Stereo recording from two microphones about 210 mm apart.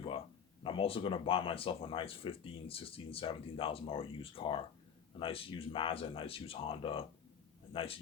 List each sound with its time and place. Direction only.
0.6 s a man's voice: 25° left (ahead or behind)